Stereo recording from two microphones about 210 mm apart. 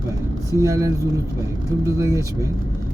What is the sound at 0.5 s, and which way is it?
Speech, 15° right (ahead or behind).